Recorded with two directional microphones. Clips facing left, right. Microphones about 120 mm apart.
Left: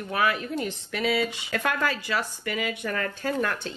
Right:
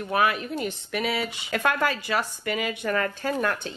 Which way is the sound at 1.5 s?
40° right (ahead or behind).